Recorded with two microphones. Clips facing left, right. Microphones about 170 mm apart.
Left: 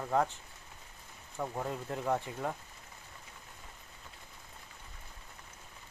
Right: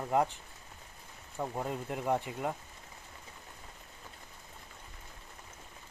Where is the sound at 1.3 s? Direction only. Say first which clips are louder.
Right 1 dB; 10° right (ahead or behind).